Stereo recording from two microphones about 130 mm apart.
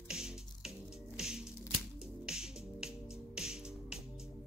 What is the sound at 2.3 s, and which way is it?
Music, 5° right (ahead or behind).